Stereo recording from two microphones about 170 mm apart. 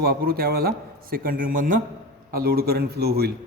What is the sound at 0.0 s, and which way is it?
Speech, 65° right (ahead or behind).